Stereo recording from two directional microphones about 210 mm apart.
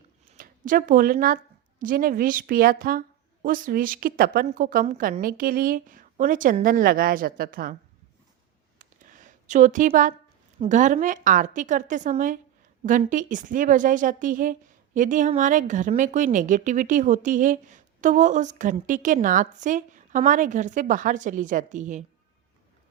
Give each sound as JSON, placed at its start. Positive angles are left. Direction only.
{"t": 0.3, "sound": "a woman's voice", "side_deg": -40}
{"t": 8.8, "sound": "a sound", "side_deg": -40}
{"t": 10.6, "sound": "speech", "side_deg": -35}